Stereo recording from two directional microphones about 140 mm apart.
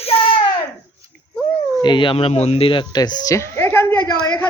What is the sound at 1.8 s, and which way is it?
A woman's voice, 35° left (ahead or behind).